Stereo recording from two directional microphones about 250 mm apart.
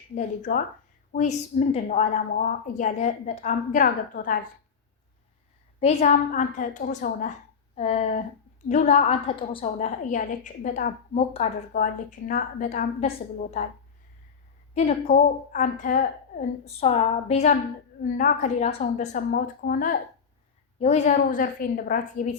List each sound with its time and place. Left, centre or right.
0.1 s a woman's voice: left
5.8 s a woman's voice: left
14.7 s a woman's voice: left